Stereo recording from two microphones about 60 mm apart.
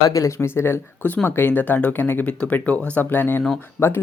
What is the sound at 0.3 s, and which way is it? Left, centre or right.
Speech, left.